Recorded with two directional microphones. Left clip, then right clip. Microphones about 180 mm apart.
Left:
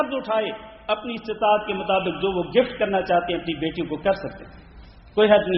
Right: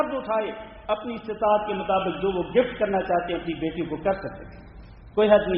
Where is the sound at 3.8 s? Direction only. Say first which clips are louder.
Left 2 dB; 25° left (ahead or behind).